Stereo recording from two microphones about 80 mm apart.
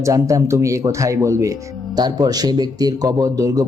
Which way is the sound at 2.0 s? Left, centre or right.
Right.